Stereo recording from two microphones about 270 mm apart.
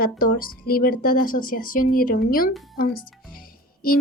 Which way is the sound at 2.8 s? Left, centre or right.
Left.